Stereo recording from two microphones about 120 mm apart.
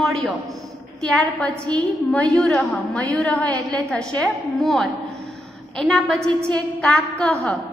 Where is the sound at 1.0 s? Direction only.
5° left (ahead or behind).